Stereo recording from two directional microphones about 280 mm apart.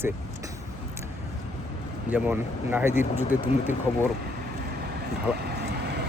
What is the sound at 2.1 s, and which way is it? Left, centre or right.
Speech, centre.